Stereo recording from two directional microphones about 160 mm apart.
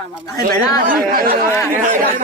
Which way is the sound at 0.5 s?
65° right (ahead or behind).